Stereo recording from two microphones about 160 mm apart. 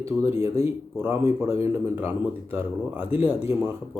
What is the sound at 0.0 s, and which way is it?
Speech, 15° right (ahead or behind).